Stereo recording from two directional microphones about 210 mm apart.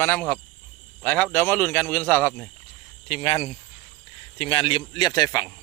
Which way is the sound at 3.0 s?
30° left (ahead or behind).